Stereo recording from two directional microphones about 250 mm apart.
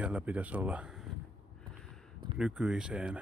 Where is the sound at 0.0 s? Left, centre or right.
Centre.